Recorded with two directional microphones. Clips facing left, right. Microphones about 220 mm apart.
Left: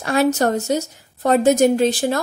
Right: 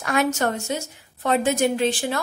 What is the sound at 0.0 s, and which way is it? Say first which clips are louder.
A woman's voice: left 5 dB; 30° left (ahead or behind).